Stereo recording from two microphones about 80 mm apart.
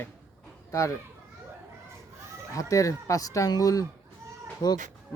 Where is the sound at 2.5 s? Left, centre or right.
Left.